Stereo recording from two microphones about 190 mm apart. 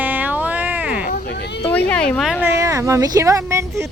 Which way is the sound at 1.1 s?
60° left (ahead or behind).